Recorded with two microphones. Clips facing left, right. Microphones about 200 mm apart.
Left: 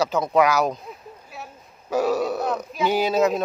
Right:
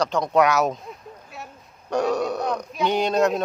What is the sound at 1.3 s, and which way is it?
Burping, centre (ahead or behind).